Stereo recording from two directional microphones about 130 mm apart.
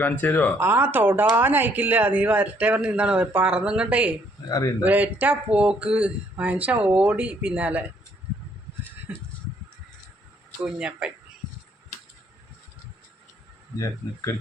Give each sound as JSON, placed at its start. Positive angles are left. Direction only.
{"t": 0.0, "sound": "speech", "side_deg": 15}
{"t": 0.6, "sound": "speech", "side_deg": -15}
{"t": 4.4, "sound": "speech", "side_deg": 25}
{"t": 4.8, "sound": "speech", "side_deg": -15}
{"t": 10.6, "sound": "speech", "side_deg": -5}
{"t": 13.7, "sound": "speech", "side_deg": 25}